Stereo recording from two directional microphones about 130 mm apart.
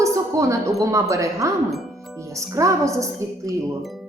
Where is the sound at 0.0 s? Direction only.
25° right (ahead or behind).